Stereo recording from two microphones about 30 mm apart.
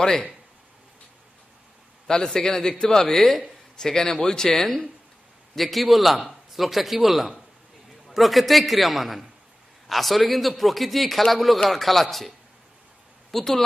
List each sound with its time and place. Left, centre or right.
0.0 s speech: left
2.0 s speech: left
5.6 s a man's voice: centre
13.3 s speech: centre